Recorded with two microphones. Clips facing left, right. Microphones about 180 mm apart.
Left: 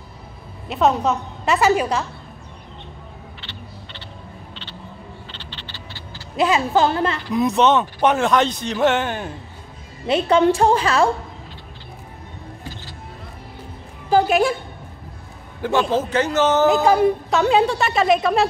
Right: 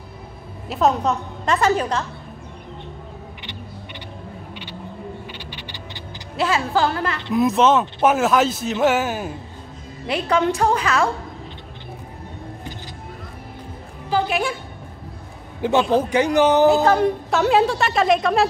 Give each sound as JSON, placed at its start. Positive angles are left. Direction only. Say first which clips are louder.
{"t": 0.7, "sound": "a woman's voice", "louder": "left 1 dB", "side_deg": 0}
{"t": 3.3, "sound": "a sound", "louder": "right 2 dB", "side_deg": -15}
{"t": 5.3, "sound": "music", "louder": "right 3 dB", "side_deg": -10}
{"t": 6.3, "sound": "a woman's voice", "louder": "left 3 dB", "side_deg": 20}
{"t": 7.3, "sound": "a man's voice", "louder": "right 1 dB", "side_deg": 0}
{"t": 10.0, "sound": "a woman's voice", "louder": "left 4 dB", "side_deg": 25}
{"t": 14.1, "sound": "a woman's voice", "louder": "left 5 dB", "side_deg": 45}
{"t": 15.6, "sound": "speech", "louder": "right 2 dB", "side_deg": -15}
{"t": 16.8, "sound": "a woman's voice", "louder": "left 1 dB", "side_deg": 10}
{"t": 17.3, "sound": "a man's voice", "louder": "even", "side_deg": 0}